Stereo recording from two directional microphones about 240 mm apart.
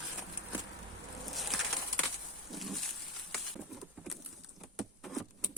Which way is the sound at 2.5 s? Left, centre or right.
Centre.